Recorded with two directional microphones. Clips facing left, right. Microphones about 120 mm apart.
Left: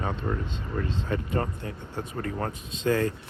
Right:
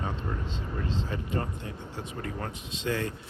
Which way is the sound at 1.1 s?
55° left (ahead or behind).